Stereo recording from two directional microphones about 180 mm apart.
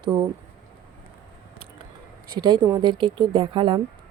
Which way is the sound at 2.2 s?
25° right (ahead or behind).